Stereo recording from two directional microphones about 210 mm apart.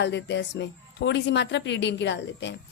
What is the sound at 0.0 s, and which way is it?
Speech, 55° left (ahead or behind).